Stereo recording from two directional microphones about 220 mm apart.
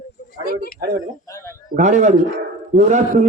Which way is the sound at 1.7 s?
35° right (ahead or behind).